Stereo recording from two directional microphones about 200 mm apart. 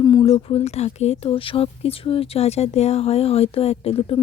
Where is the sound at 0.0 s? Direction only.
20° left (ahead or behind).